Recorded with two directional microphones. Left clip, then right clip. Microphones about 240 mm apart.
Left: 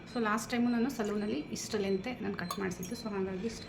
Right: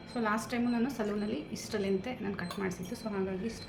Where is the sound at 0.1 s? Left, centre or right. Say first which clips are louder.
Even; centre.